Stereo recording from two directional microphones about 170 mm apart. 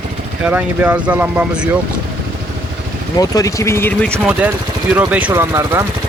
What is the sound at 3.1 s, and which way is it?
Speech, 20° left (ahead or behind).